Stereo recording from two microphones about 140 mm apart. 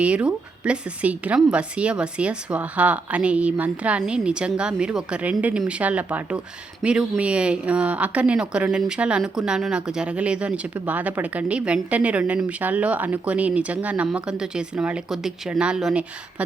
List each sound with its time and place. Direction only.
0.0 s a woman's voice: 10° right (ahead or behind)